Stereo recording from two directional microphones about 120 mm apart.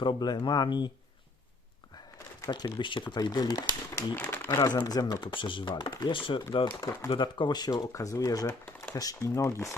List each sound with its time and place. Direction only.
0.0 s speech: 40° left (ahead or behind)
2.5 s speech: 40° left (ahead or behind)
4.1 s speech: 15° left (ahead or behind)
4.6 s speech: 35° left (ahead or behind)